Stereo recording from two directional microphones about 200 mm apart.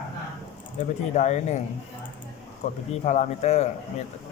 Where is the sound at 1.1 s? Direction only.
35° left (ahead or behind).